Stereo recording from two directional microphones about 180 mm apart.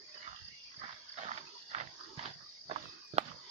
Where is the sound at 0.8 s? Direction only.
35° right (ahead or behind).